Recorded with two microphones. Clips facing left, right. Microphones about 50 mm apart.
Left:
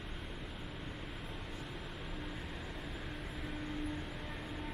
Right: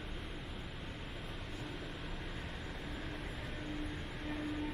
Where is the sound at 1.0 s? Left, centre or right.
Centre.